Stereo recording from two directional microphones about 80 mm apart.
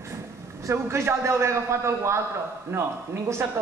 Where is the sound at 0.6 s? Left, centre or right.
Right.